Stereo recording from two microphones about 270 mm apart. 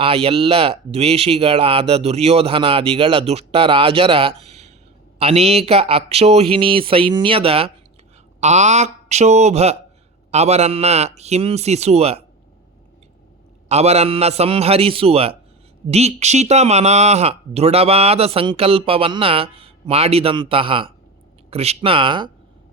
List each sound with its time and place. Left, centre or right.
0.0 s speech: right
13.7 s speech: right